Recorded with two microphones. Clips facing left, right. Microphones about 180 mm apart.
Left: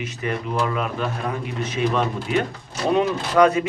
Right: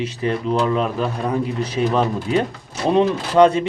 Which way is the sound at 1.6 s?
35° right (ahead or behind).